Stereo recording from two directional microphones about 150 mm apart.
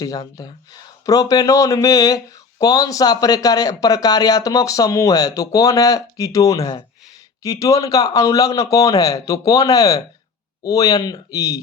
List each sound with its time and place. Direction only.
0.0 s speech: 25° left (ahead or behind)